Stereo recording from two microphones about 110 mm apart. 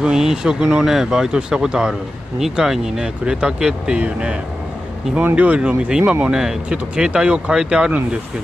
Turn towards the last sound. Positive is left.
turn(degrees=-5)  # may be behind; listen again after turning